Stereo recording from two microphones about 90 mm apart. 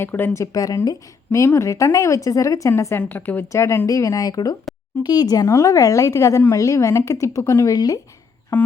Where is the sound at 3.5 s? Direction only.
35° left (ahead or behind).